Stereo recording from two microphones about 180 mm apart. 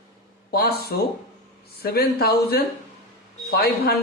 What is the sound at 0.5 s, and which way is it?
Speech, 55° left (ahead or behind).